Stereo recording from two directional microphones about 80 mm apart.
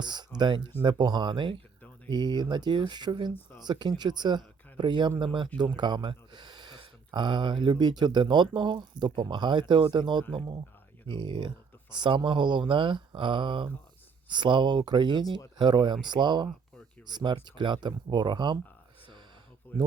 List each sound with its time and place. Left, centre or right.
0.0 s speech: right
5.2 s speech: right
5.5 s speech: right
11.1 s speech: right
11.9 s speech: right
14.3 s speech: right